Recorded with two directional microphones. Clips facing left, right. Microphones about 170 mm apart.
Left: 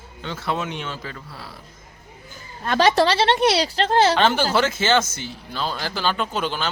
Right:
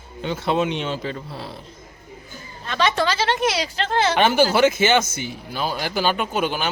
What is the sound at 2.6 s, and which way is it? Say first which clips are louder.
Speech: left 3 dB; 50° left (ahead or behind).